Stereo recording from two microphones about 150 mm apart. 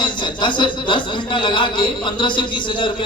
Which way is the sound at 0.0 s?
30° left (ahead or behind).